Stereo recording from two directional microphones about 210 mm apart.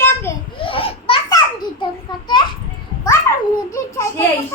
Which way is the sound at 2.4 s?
20° left (ahead or behind).